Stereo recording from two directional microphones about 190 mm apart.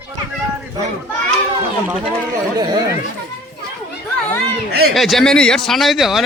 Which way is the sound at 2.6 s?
20° right (ahead or behind).